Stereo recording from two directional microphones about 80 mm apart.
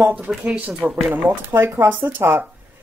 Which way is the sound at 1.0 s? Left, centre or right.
Right.